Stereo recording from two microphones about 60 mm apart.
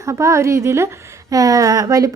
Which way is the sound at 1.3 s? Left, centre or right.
Right.